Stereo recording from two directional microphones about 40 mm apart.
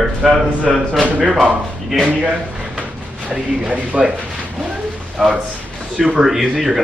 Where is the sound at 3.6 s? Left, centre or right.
Right.